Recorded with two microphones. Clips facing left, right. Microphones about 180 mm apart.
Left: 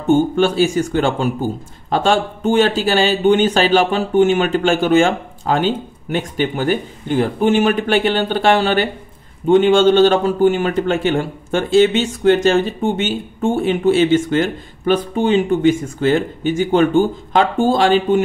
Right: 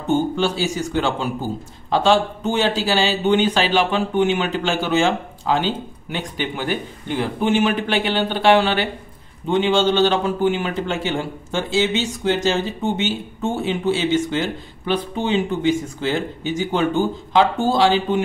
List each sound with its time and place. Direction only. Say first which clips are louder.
0.1 s speech: left 5 dB; 50° left (ahead or behind)